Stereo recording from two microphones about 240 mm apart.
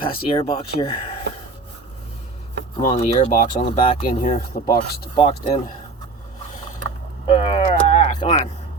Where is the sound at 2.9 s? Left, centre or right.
Left.